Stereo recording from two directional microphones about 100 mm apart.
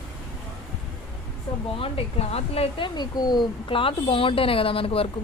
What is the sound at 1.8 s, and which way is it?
Speech, 75° left (ahead or behind).